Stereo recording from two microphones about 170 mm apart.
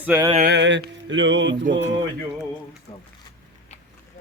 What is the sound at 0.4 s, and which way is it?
Mantra, 90° right.